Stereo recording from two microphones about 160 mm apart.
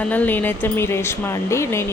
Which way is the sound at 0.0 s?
10° left (ahead or behind).